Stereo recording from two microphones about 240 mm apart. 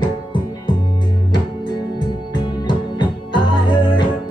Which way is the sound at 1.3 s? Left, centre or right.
Centre.